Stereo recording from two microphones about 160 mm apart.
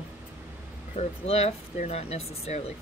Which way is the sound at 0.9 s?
40° left (ahead or behind).